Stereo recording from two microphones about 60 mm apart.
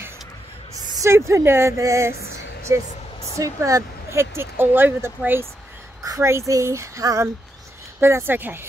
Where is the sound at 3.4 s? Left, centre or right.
Right.